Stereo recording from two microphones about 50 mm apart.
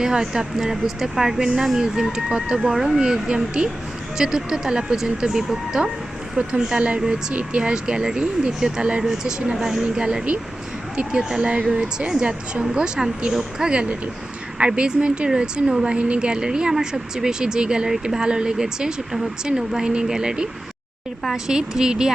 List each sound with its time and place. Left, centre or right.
0.0 s speech: centre
9.8 s speech: centre